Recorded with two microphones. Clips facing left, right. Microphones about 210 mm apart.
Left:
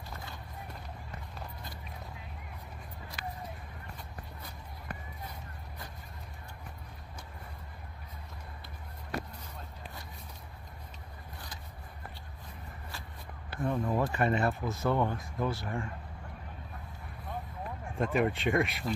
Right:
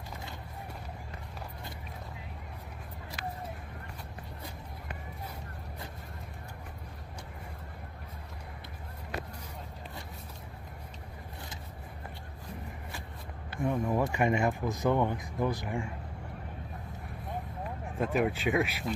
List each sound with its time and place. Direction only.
13.6 s speech: 15° right (ahead or behind)
17.9 s speech: 5° right (ahead or behind)